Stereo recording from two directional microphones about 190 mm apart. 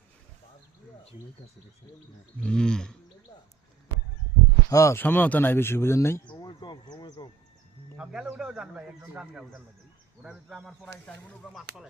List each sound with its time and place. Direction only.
2.4 s a man's voice: 5° left (ahead or behind)
4.7 s speech: 15° left (ahead or behind)
6.2 s a sound: 20° left (ahead or behind)
7.9 s a man's voice: 5° right (ahead or behind)